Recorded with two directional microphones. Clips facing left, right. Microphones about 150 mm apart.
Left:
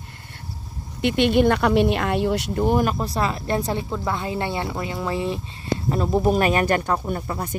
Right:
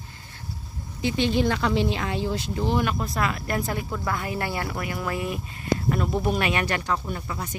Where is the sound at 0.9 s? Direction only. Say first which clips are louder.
Left 5 dB; 65° left (ahead or behind).